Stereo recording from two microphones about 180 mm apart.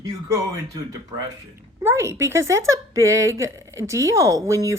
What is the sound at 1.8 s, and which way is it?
Speech, 15° right (ahead or behind).